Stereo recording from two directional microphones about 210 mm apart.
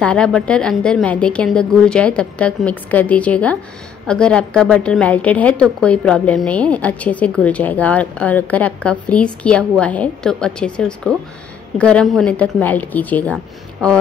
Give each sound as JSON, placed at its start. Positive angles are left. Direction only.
{"t": 0.0, "sound": "a woman's voice", "side_deg": 5}